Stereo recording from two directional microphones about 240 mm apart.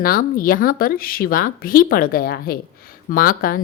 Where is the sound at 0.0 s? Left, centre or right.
Left.